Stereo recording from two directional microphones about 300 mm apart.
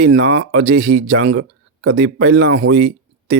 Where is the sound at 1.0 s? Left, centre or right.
Right.